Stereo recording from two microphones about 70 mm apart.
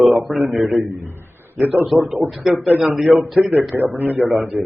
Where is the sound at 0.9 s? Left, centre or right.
Right.